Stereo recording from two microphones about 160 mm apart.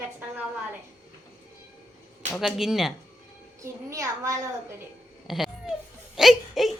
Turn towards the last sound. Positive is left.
turn(degrees=0)  # may be behind; listen again after turning